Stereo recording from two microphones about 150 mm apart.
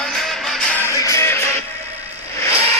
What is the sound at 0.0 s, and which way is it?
Music, centre (ahead or behind).